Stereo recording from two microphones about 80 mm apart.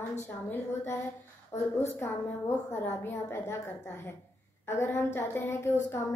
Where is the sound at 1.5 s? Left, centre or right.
Left.